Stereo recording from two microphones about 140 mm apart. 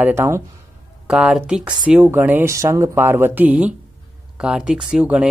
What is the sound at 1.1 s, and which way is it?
Speech, 10° right (ahead or behind).